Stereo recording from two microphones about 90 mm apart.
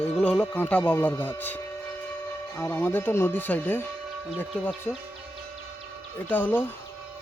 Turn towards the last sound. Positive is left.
turn(degrees=20)  # may be behind; listen again after turning